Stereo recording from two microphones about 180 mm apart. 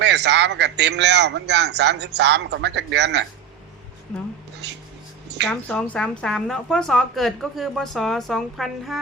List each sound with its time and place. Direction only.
0.0 s a man's voice: 70° right (ahead or behind)
4.6 s a sound: 70° right (ahead or behind)
5.5 s a woman's voice: 5° left (ahead or behind)